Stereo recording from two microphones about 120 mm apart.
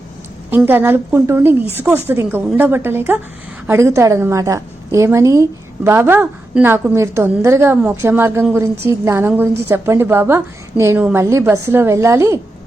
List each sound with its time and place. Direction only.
0.5 s a woman's voice: 15° right (ahead or behind)